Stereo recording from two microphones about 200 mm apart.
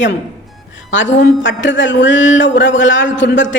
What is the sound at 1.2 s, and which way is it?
A man's voice, 65° left (ahead or behind).